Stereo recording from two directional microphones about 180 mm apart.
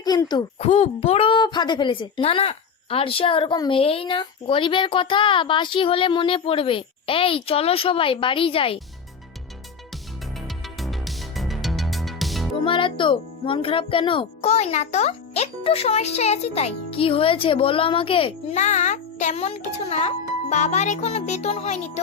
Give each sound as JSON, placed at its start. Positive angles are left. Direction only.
{"t": 0.0, "sound": "a child's voice", "side_deg": 20}
{"t": 0.6, "sound": "a woman's voice", "side_deg": 40}
{"t": 10.8, "sound": "music", "side_deg": 0}
{"t": 12.6, "sound": "speech", "side_deg": 30}